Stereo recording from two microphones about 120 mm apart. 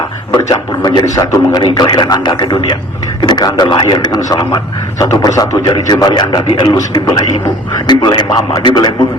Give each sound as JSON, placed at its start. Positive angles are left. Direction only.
{"t": 0.4, "sound": "a man's voice", "side_deg": 35}
{"t": 7.9, "sound": "a man's voice", "side_deg": 35}